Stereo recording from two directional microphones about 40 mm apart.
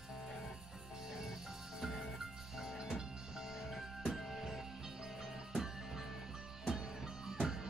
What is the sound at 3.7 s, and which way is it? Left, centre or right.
Music, centre.